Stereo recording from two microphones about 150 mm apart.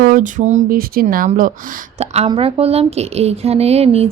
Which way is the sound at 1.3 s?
60° right (ahead or behind).